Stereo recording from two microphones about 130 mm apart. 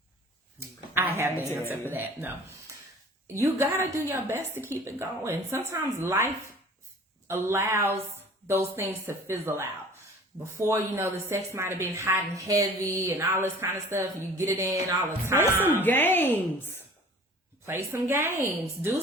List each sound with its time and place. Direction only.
0.6 s a sound: 20° right (ahead or behind)
1.7 s a woman's voice: 15° right (ahead or behind)
3.3 s speech: 20° right (ahead or behind)
15.8 s a woman's voice: 15° left (ahead or behind)
17.7 s a woman's voice: 20° right (ahead or behind)